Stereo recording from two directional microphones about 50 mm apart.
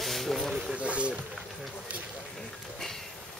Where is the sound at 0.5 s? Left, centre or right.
Right.